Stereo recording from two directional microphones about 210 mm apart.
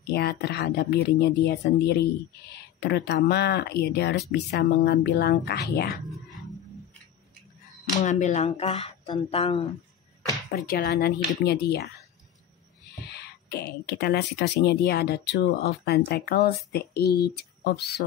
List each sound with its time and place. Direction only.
0.1 s speech: 50° left (ahead or behind)
8.0 s speech: 35° left (ahead or behind)
10.5 s speech: 45° left (ahead or behind)
13.1 s speech: 50° left (ahead or behind)